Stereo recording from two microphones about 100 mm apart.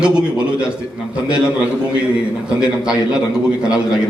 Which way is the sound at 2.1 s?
10° right (ahead or behind).